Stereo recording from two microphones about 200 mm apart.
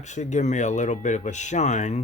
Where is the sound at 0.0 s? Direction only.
35° left (ahead or behind).